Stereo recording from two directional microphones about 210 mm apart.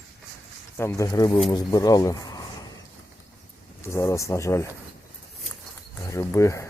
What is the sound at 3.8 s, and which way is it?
Speech, 15° left (ahead or behind).